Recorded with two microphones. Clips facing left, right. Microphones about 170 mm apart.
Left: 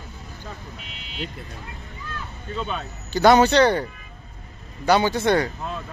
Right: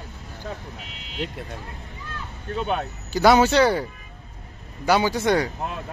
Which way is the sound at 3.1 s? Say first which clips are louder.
Left 1 dB; 10° right (ahead or behind).